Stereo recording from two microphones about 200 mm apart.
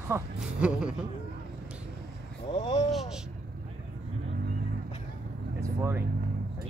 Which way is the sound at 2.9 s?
Centre (ahead or behind).